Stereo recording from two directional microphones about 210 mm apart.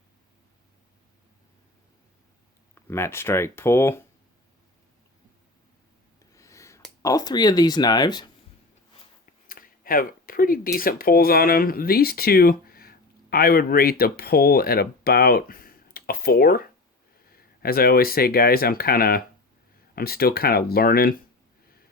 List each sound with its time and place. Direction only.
2.7 s speech: 10° left (ahead or behind)
6.3 s a sound: 15° left (ahead or behind)
7.0 s speech: 15° left (ahead or behind)
9.5 s speech: 40° left (ahead or behind)